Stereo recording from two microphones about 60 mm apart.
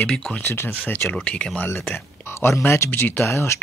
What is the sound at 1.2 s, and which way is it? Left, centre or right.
Speech, centre.